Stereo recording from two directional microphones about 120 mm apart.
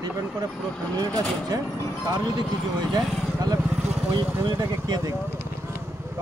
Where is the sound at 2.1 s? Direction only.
40° right (ahead or behind).